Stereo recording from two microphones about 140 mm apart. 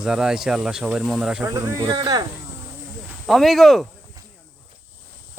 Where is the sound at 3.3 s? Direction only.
Centre (ahead or behind).